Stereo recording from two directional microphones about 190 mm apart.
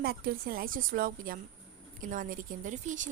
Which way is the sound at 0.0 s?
55° right (ahead or behind).